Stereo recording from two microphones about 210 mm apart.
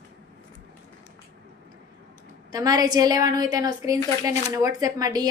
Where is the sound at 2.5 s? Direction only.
15° right (ahead or behind).